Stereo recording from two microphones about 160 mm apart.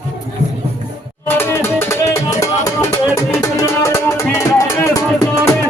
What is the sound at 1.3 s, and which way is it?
Music, 15° left (ahead or behind).